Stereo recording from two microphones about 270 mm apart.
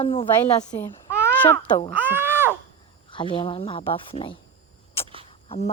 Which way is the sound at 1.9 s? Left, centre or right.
Centre.